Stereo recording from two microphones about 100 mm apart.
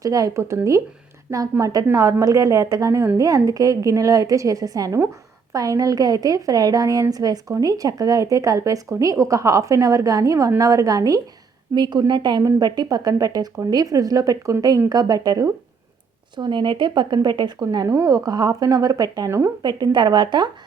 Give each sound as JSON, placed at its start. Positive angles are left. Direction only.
{"t": 0.0, "sound": "speech", "side_deg": -35}
{"t": 12.4, "sound": "speech", "side_deg": -35}
{"t": 16.3, "sound": "speech", "side_deg": -50}
{"t": 17.8, "sound": "speech", "side_deg": -30}
{"t": 19.6, "sound": "speech", "side_deg": -45}